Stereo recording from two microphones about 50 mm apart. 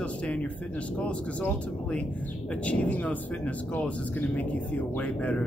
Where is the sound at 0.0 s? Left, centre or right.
Left.